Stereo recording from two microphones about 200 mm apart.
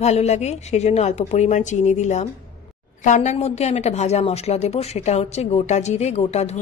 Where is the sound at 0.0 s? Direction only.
35° left (ahead or behind).